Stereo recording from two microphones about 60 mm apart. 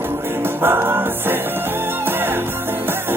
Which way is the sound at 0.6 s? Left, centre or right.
Right.